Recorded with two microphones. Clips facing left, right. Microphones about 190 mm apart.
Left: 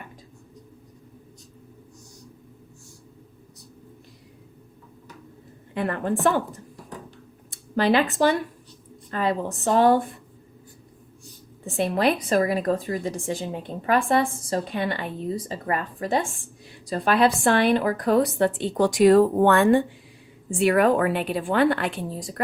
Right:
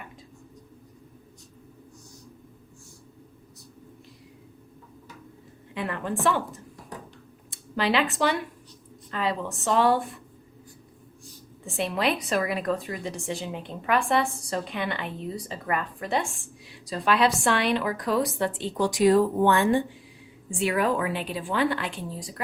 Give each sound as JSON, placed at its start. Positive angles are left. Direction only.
{"t": 5.7, "sound": "a woman's voice", "side_deg": 45}
{"t": 7.8, "sound": "a woman's voice", "side_deg": 45}
{"t": 11.6, "sound": "a woman's voice", "side_deg": 45}
{"t": 16.9, "sound": "a woman's voice", "side_deg": 50}